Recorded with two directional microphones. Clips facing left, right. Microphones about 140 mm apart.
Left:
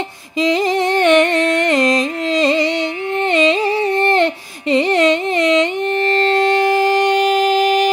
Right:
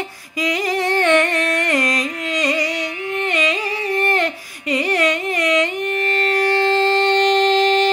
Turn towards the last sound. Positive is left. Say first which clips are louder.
# left 1 dB
turn(degrees=10)  # may be behind; listen again after turning